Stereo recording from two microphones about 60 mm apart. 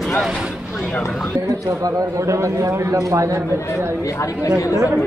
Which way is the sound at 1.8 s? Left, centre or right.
Right.